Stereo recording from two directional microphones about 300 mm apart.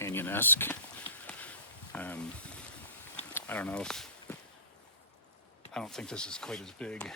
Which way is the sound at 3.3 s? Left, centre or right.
Centre.